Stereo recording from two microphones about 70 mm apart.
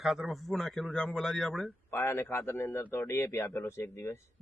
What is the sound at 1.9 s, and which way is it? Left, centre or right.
Speech, left.